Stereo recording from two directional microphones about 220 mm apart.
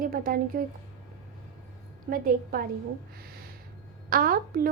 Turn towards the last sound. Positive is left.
turn(degrees=-40)  # may be behind; listen again after turning